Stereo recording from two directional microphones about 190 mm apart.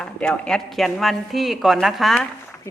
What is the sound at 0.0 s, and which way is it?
A woman's voice, 5° left (ahead or behind).